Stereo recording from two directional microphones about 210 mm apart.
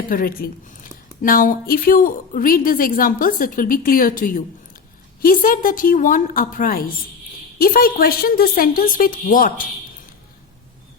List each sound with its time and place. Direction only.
0.1 s a woman's voice: 45° left (ahead or behind)